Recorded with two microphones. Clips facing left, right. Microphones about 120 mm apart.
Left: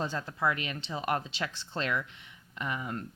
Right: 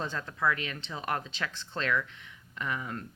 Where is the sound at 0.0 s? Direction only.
30° left (ahead or behind).